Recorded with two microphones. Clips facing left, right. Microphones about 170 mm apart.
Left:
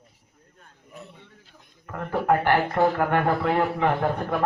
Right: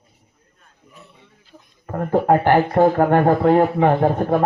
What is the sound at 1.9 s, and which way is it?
Speech, 40° right (ahead or behind).